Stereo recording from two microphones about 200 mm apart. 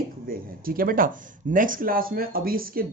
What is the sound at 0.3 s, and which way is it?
Speech, 45° right (ahead or behind).